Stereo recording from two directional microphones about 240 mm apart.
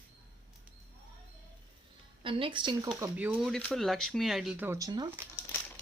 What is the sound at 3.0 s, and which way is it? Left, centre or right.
Speech, centre.